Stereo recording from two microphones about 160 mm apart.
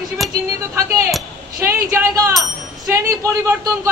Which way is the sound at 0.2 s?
Centre (ahead or behind).